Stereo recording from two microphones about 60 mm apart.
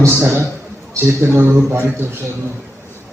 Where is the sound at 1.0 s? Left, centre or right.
Right.